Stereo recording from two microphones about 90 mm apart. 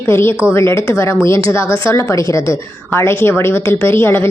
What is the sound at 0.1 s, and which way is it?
A woman's voice, 30° left (ahead or behind).